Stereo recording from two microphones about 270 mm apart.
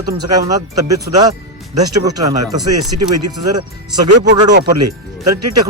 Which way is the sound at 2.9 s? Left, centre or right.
Right.